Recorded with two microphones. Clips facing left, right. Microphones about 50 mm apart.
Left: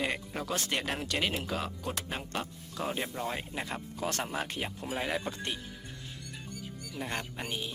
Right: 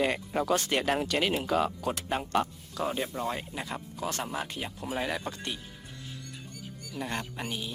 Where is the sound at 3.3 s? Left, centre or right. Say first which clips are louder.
Right 1 dB; centre.